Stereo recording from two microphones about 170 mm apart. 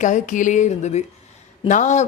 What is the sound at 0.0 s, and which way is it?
A woman's voice, 50° left (ahead or behind).